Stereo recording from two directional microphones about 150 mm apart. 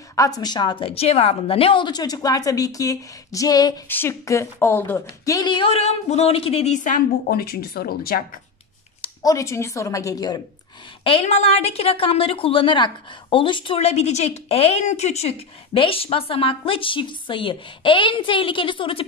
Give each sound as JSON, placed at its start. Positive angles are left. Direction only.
{"t": 0.1, "sound": "a woman's voice", "side_deg": 25}
{"t": 5.0, "sound": "speech", "side_deg": 25}
{"t": 9.2, "sound": "a woman's voice", "side_deg": 20}
{"t": 11.1, "sound": "a woman's voice", "side_deg": 45}